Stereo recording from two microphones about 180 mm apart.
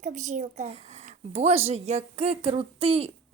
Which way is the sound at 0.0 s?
40° right (ahead or behind).